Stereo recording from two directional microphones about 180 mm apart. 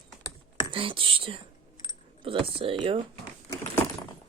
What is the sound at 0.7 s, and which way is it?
Speech, 30° right (ahead or behind).